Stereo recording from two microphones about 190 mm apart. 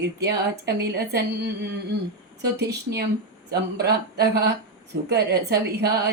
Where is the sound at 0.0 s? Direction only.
60° right (ahead or behind).